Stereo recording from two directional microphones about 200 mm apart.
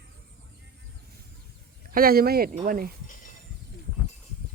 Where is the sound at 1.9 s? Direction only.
50° right (ahead or behind).